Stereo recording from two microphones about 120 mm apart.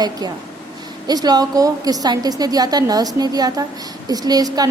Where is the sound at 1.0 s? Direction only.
35° right (ahead or behind).